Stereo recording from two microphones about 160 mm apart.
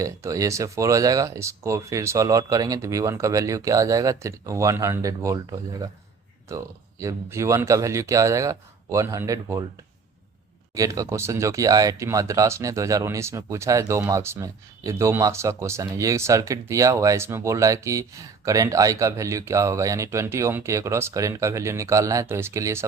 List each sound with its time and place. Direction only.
0.0 s speech: 20° right (ahead or behind)
10.8 s speech: 20° right (ahead or behind)